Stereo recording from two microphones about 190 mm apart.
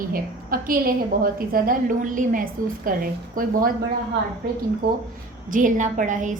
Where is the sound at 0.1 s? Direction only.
50° right (ahead or behind).